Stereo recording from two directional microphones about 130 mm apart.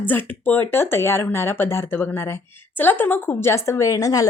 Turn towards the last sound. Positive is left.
turn(degrees=25)  # may be behind; listen again after turning